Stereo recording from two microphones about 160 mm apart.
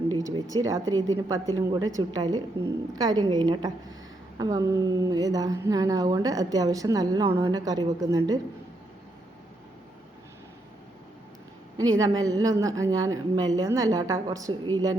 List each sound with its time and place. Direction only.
0.1 s a woman's voice: 25° right (ahead or behind)
11.8 s a woman's voice: 20° right (ahead or behind)